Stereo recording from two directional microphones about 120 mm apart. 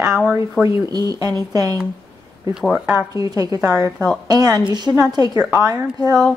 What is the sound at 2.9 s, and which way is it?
A woman's voice, 30° right (ahead or behind).